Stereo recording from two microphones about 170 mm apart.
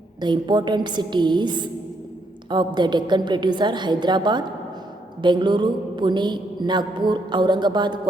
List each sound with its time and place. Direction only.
0.2 s mantra: 25° right (ahead or behind)